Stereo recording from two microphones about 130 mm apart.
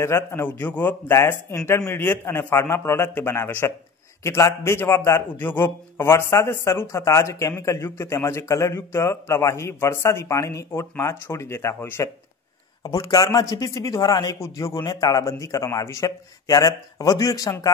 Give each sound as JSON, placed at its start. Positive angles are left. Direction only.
{"t": 0.0, "sound": "a man's voice", "side_deg": 20}